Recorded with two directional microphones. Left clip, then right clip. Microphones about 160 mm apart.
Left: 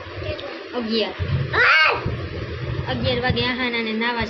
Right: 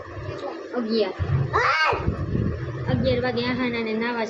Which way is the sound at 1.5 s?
35° right (ahead or behind).